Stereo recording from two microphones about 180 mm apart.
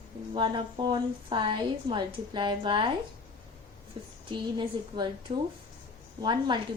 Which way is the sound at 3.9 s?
30° right (ahead or behind).